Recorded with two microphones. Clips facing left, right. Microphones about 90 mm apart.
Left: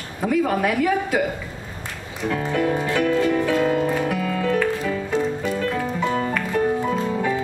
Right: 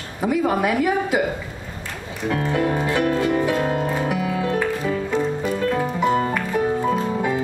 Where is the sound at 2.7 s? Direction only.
10° right (ahead or behind).